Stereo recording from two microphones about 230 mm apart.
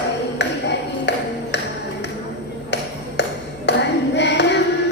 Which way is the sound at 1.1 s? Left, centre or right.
Left.